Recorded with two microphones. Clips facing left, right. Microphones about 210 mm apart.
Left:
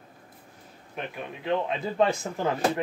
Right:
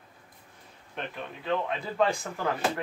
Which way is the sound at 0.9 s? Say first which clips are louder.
Left 2 dB; 10° left (ahead or behind).